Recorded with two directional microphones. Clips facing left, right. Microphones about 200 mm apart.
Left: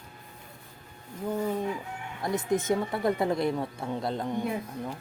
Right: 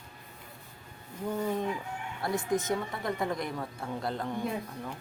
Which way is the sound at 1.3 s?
10° left (ahead or behind).